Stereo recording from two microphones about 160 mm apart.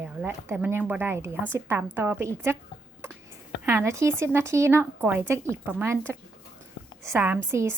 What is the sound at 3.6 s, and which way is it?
Speech, 15° right (ahead or behind).